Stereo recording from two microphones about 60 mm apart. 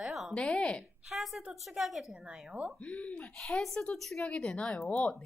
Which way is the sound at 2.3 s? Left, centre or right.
Right.